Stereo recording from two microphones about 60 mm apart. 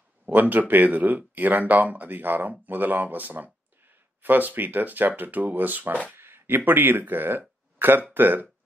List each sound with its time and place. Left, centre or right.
0.2 s speech: right
6.1 s speech: right